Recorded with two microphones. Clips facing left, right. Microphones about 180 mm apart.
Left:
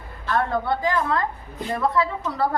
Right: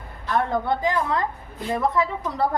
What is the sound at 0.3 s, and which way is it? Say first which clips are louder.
A woman's voice: even; 15° right (ahead or behind).